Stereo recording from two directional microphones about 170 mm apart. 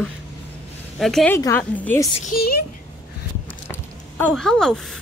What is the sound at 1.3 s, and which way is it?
Speech, 15° left (ahead or behind).